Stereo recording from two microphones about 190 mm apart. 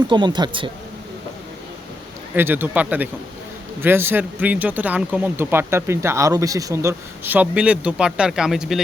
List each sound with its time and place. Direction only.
0.1 s speech: 25° right (ahead or behind)
2.3 s speech: 10° right (ahead or behind)